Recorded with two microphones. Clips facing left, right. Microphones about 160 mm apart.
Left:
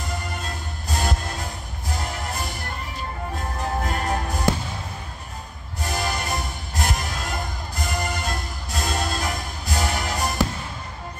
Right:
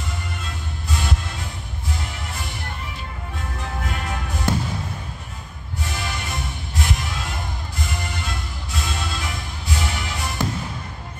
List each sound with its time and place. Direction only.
0.1 s music: 40° left (ahead or behind)
5.8 s music: 40° left (ahead or behind)